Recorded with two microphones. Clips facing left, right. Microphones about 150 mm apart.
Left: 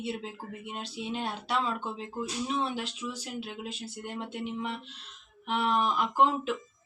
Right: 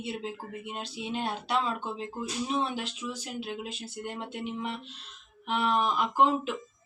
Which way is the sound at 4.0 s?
15° right (ahead or behind).